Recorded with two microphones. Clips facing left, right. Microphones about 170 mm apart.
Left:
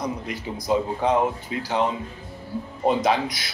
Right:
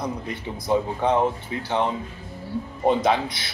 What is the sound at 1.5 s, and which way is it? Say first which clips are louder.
Speech: left 1 dB; 25° right (ahead or behind).